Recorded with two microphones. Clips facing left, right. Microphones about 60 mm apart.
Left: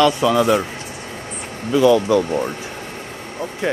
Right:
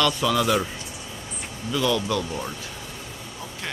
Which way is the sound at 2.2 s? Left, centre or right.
Left.